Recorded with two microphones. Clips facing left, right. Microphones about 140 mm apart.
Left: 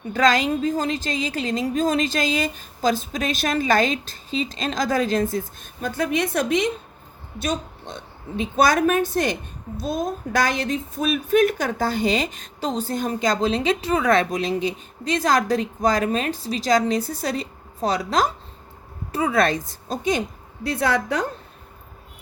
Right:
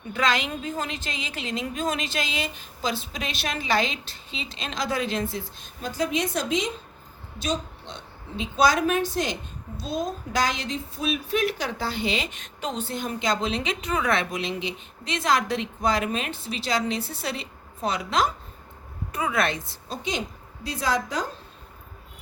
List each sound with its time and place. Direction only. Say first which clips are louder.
0.1 s a woman's voice: left 6 dB; 40° left (ahead or behind)
5.8 s a woman's voice: left 3 dB; 55° left (ahead or behind)
20.7 s a woman's voice: left 5 dB; 60° left (ahead or behind)